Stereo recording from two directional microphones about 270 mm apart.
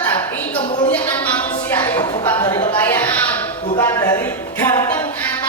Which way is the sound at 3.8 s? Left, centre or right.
Centre.